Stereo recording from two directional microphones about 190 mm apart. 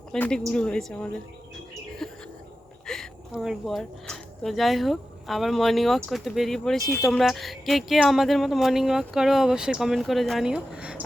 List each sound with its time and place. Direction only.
0.1 s speech: 5° left (ahead or behind)
2.0 s a sound: centre (ahead or behind)
2.8 s speech: centre (ahead or behind)